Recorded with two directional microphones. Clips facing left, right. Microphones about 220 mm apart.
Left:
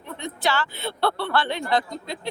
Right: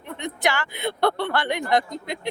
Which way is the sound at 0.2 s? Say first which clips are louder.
Even; 15° right (ahead or behind).